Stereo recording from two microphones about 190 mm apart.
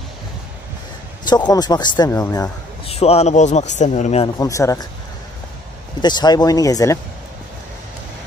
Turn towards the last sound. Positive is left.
turn(degrees=15)  # may be behind; listen again after turning